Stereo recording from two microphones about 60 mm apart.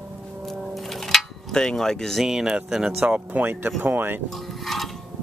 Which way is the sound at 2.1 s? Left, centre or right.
Centre.